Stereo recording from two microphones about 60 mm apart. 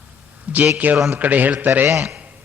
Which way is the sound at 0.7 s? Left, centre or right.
Right.